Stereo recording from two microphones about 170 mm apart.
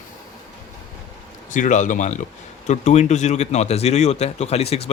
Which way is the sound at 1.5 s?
50° left (ahead or behind).